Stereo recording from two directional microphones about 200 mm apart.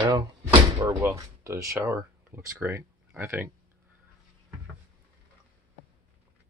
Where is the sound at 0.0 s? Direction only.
20° right (ahead or behind).